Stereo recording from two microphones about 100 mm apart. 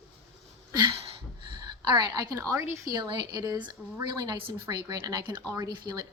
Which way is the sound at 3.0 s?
50° right (ahead or behind).